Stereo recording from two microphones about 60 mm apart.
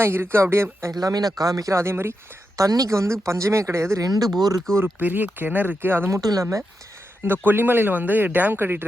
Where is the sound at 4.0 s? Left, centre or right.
Right.